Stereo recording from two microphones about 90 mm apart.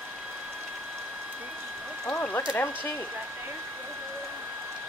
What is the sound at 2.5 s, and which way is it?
Speech, 20° left (ahead or behind).